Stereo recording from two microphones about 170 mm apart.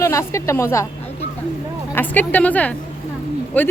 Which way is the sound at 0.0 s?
15° left (ahead or behind).